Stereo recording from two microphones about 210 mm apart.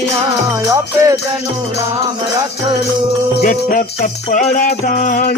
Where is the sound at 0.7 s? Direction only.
15° right (ahead or behind).